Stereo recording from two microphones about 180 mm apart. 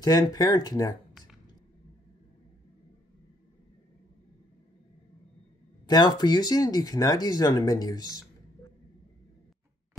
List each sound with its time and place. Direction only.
0.0 s speech: 20° left (ahead or behind)
5.9 s speech: 25° left (ahead or behind)